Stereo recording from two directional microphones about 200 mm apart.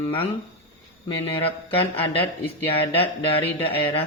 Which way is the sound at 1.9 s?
30° left (ahead or behind).